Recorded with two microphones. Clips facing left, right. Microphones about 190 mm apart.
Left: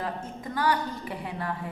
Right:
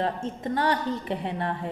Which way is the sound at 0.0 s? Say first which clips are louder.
Right 5 dB; 25° right (ahead or behind).